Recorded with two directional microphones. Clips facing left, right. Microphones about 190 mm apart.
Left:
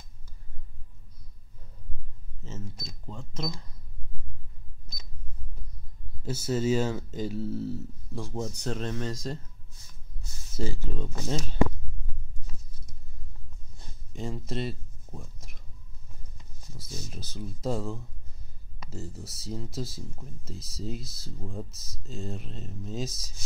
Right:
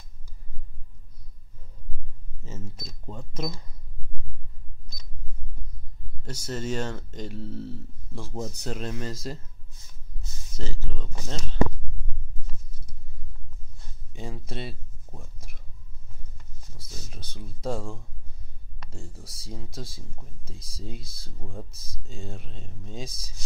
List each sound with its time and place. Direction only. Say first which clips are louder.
2.4 s speech: right 1 dB; 10° right (ahead or behind)
6.2 s speech: left 5 dB; 5° left (ahead or behind)
10.5 s speech: left 5 dB; 10° left (ahead or behind)
14.1 s speech: left 3 dB; centre (ahead or behind)
16.7 s speech: left 4 dB; centre (ahead or behind)